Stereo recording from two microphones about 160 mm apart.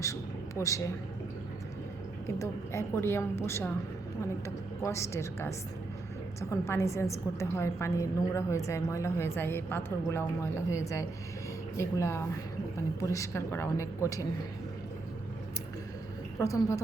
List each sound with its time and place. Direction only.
0.0 s a man's voice: 20° left (ahead or behind)
2.2 s a woman's voice: 15° left (ahead or behind)
16.4 s a woman's voice: 20° left (ahead or behind)